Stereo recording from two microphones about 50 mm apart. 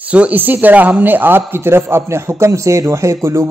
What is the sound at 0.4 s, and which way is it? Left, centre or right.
A man's voice, right.